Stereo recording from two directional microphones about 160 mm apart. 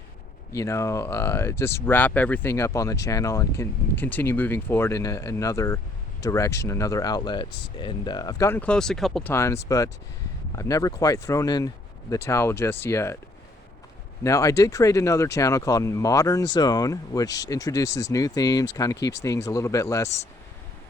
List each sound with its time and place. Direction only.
0.5 s speech: 20° left (ahead or behind); by 9.3 s centre (ahead or behind)
9.3 s speech: 15° left (ahead or behind)
14.3 s speech: 20° left (ahead or behind)